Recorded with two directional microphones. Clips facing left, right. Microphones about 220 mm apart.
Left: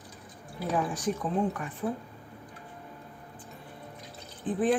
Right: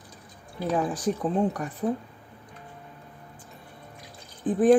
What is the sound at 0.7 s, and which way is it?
Speech, 30° right (ahead or behind).